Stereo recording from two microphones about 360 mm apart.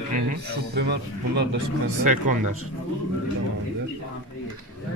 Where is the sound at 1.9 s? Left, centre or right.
Right.